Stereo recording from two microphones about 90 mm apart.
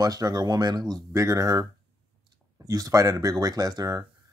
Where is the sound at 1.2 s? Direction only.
35° right (ahead or behind).